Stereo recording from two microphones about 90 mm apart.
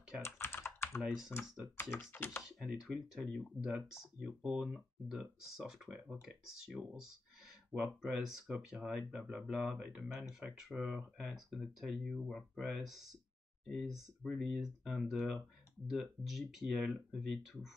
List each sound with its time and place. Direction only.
0.2 s computer keyboard: 25° left (ahead or behind)
1.0 s speech: 10° right (ahead or behind)
2.1 s speech: 25° left (ahead or behind)
2.4 s speech: 5° right (ahead or behind)